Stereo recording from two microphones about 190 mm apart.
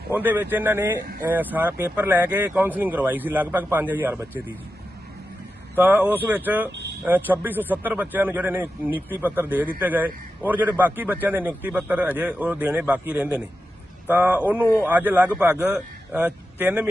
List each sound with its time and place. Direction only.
0.1 s speech: 10° right (ahead or behind)
5.7 s speech: 10° right (ahead or behind)
6.7 s vehicle: 65° right (ahead or behind)
7.0 s speech: 10° right (ahead or behind)